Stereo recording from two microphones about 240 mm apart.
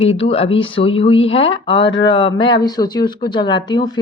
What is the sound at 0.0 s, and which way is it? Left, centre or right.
Speech, left.